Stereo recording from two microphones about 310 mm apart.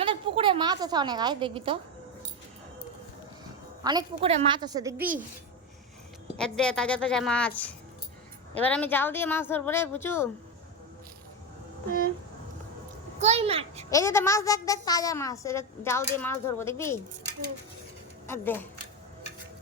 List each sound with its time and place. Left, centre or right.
0.0 s a woman's voice: centre
3.8 s a woman's voice: centre
6.3 s a woman's voice: centre
11.9 s a sound: right
13.1 s a child's voice: right
13.9 s a woman's voice: centre
18.3 s a woman's voice: centre